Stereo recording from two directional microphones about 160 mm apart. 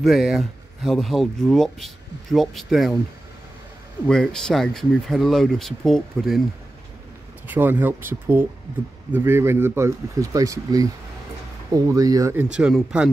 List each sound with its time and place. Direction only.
0.0 s speech: centre (ahead or behind)
4.1 s speech: 5° left (ahead or behind)
7.4 s speech: 10° right (ahead or behind)
12.5 s speech: 5° right (ahead or behind)